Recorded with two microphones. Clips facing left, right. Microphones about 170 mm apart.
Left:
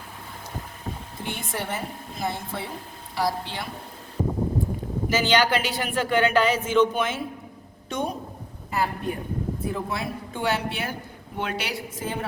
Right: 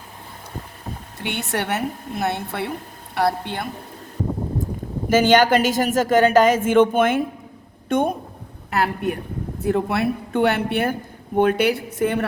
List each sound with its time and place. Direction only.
1.2 s a woman's voice: 75° right (ahead or behind); by 3.7 s 55° right (ahead or behind)
5.0 s a woman's voice: 50° right (ahead or behind)
8.7 s a woman's voice: 75° right (ahead or behind)